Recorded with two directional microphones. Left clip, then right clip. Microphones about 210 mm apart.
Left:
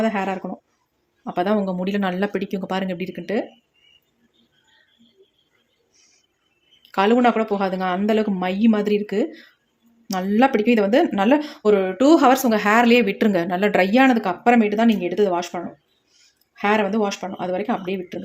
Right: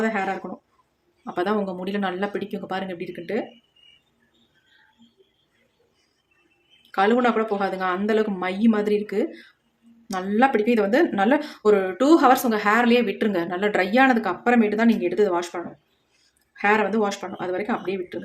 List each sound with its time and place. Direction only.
0.0 s speech: 25° left (ahead or behind)
6.9 s speech: 25° left (ahead or behind)